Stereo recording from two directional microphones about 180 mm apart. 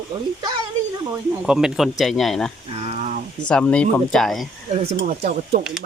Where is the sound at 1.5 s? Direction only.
5° right (ahead or behind).